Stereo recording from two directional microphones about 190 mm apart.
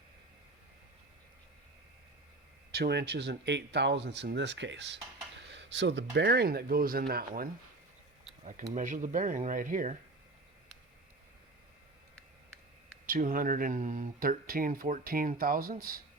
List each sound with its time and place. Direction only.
2.7 s speech: 60° right (ahead or behind)
8.7 s speech: 40° right (ahead or behind)
13.1 s speech: 50° right (ahead or behind)